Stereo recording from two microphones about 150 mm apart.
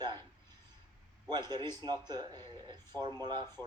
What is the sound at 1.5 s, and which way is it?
Speech, 30° right (ahead or behind).